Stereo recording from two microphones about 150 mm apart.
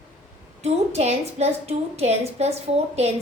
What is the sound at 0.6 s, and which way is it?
A woman's voice, 45° right (ahead or behind).